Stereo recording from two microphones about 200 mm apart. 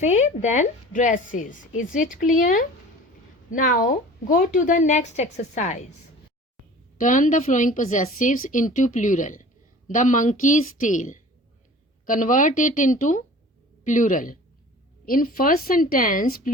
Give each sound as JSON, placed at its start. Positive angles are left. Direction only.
{"t": 0.0, "sound": "a woman's voice", "side_deg": 35}
{"t": 7.0, "sound": "a woman's voice", "side_deg": 40}